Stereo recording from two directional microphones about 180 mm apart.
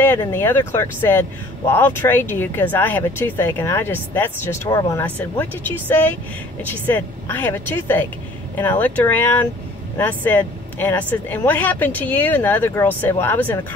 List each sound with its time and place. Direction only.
0.0 s speech: 10° left (ahead or behind)